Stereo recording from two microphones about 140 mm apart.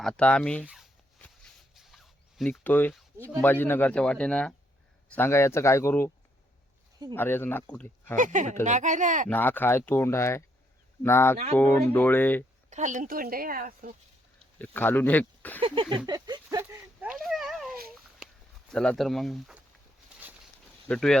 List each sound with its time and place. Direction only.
0.0 s speech: 5° left (ahead or behind)
0.6 s speech: 5° right (ahead or behind)
1.8 s a sound: centre (ahead or behind)
2.5 s speech: 15° left (ahead or behind)
7.1 s speech: 15° left (ahead or behind)
8.1 s speech: 65° right (ahead or behind)
9.3 s speech: 15° left (ahead or behind)
12.7 s speech: 65° right (ahead or behind); by 13.9 s 90° right
14.6 s speech: 15° left (ahead or behind)
15.6 s a sound: 35° right (ahead or behind)
16.6 s a sound: 10° right (ahead or behind)
17.2 s dog: centre (ahead or behind)
18.7 s speech: 5° left (ahead or behind)
20.8 s speech: 5° left (ahead or behind)